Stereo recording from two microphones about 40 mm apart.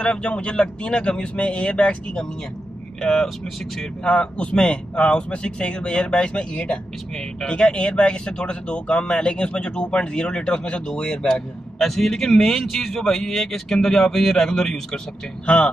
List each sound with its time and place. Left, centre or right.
0.0 s speech: left
3.0 s speech: centre
11.8 s speech: centre
15.4 s speech: left